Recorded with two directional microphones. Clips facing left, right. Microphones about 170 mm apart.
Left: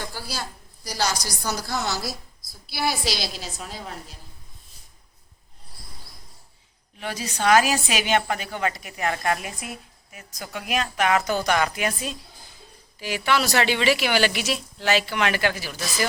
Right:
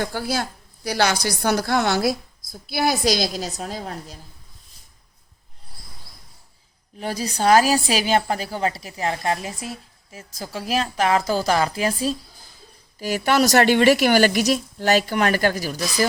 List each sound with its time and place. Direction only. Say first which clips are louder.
0.0 s a woman's voice: right 9 dB; 55° right (ahead or behind)
7.0 s a woman's voice: right 3 dB; 35° right (ahead or behind)